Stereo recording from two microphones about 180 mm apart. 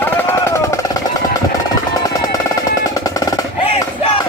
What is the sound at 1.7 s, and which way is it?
Percussion, 20° left (ahead or behind).